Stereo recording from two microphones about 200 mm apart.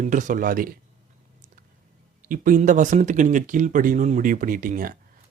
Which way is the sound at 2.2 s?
45° right (ahead or behind).